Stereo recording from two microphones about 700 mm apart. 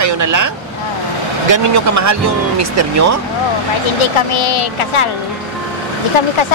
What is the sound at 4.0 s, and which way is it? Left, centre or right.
Speech, left.